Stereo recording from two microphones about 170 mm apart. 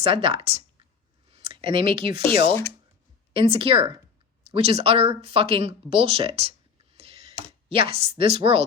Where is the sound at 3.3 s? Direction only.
35° right (ahead or behind).